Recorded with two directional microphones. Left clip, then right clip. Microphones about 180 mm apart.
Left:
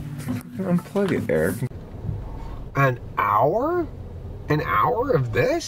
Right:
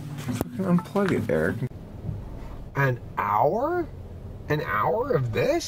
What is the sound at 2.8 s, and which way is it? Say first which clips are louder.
Speech: left 5 dB; centre (ahead or behind).